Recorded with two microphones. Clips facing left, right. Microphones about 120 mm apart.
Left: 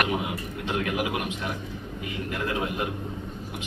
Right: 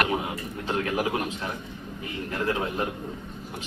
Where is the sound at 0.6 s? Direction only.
35° right (ahead or behind).